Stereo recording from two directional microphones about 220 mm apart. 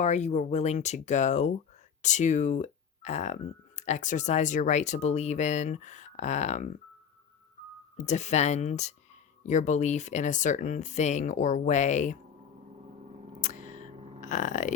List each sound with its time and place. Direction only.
0.0 s speech: 30° left (ahead or behind)
8.0 s speech: 30° left (ahead or behind)
13.4 s a sound: 35° left (ahead or behind)
14.2 s speech: 35° left (ahead or behind)